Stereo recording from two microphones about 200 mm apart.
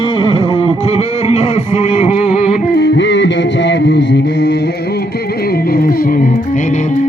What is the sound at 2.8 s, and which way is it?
Music, 65° left (ahead or behind).